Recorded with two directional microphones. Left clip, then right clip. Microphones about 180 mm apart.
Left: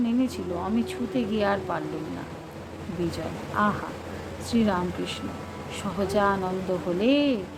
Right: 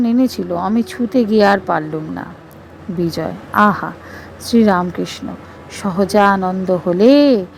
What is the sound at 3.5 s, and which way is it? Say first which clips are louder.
Speech: right 13 dB; 45° right (ahead or behind).